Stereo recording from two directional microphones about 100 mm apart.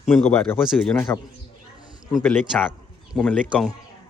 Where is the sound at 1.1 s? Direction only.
25° left (ahead or behind).